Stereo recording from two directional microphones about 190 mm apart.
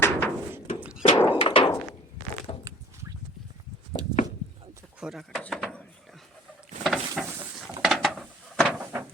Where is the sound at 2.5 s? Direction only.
30° left (ahead or behind).